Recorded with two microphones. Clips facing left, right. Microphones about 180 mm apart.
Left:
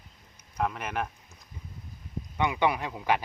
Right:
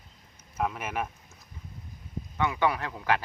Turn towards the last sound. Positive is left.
turn(degrees=15)  # may be behind; listen again after turning